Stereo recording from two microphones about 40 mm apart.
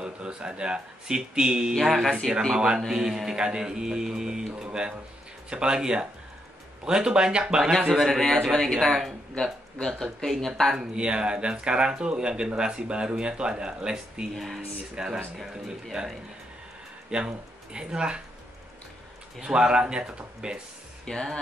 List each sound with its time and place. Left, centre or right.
0.0 s speech: right
1.7 s speech: centre
2.5 s speech: right
5.5 s speech: right
7.9 s speech: centre
8.2 s speech: centre
11.0 s speech: right
14.3 s speech: centre
15.0 s speech: centre
17.1 s speech: centre
19.4 s speech: centre
21.0 s speech: centre